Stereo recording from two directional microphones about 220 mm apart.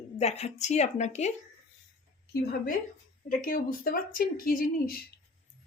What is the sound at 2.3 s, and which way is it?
Speech, 45° left (ahead or behind).